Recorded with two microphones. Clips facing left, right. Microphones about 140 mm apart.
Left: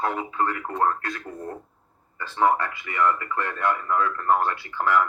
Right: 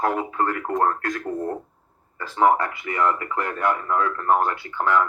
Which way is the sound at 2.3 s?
25° right (ahead or behind).